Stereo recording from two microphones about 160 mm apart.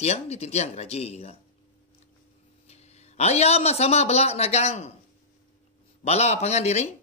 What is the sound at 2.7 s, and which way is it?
A man's voice, 40° left (ahead or behind).